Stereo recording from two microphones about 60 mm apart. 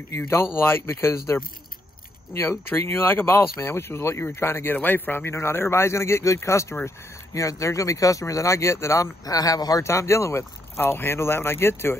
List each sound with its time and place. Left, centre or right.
0.6 s speech: left
4.7 s speech: left
9.0 s speech: left
9.8 s speech: left